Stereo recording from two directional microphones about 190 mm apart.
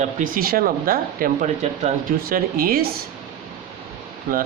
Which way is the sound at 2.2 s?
50° right (ahead or behind).